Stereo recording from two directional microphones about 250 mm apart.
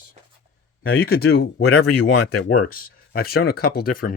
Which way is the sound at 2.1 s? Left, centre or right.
Left.